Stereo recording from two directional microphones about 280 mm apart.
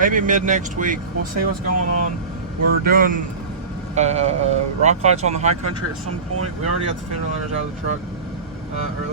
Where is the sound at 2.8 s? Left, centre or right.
Right.